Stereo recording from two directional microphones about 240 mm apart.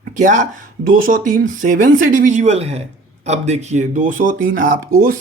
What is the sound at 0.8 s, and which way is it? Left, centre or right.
Speech, right.